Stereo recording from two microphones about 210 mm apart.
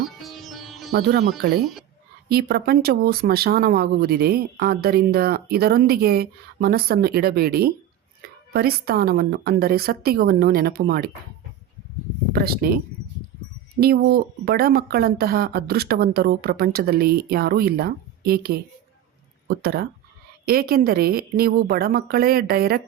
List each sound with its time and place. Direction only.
0.2 s music: centre (ahead or behind)
0.9 s speech: 50° right (ahead or behind)
12.3 s speech: 45° right (ahead or behind)